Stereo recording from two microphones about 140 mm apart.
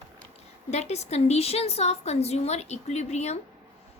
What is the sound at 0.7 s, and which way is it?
Speech, 50° left (ahead or behind).